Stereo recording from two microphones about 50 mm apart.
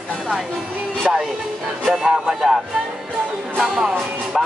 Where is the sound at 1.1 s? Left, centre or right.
Centre.